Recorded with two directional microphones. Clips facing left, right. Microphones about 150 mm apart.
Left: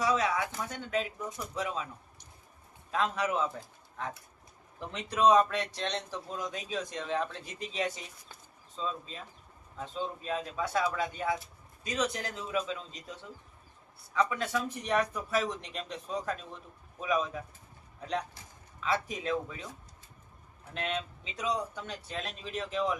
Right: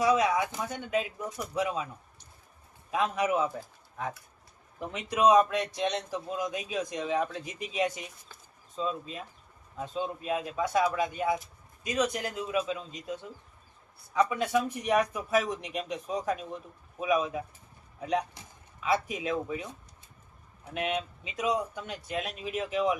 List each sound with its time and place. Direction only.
0.0 s speech: 15° right (ahead or behind)
2.9 s speech: 15° right (ahead or behind)
4.8 s speech: 10° right (ahead or behind)
14.1 s speech: 10° right (ahead or behind)
20.7 s speech: 15° right (ahead or behind)